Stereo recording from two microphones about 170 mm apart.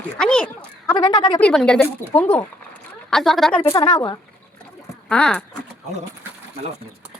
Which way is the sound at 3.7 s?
25° left (ahead or behind).